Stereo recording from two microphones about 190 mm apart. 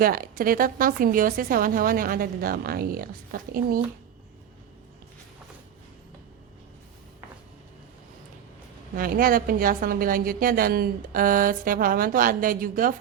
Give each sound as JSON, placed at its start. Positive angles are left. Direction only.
{"t": 0.0, "sound": "a woman's voice", "side_deg": -50}
{"t": 9.0, "sound": "a woman's voice", "side_deg": -50}